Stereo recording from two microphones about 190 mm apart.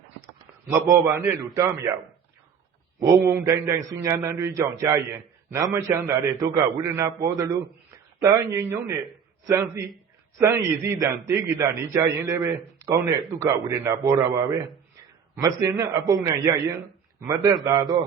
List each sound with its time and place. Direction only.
0.7 s a man's voice: 15° right (ahead or behind)
3.0 s a man's voice: 20° right (ahead or behind)